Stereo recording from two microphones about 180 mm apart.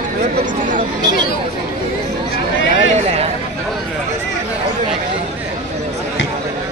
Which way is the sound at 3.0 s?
35° right (ahead or behind).